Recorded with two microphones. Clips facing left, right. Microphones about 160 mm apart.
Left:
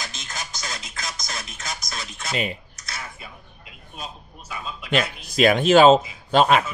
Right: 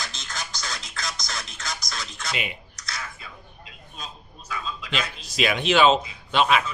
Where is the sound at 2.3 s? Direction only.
40° left (ahead or behind).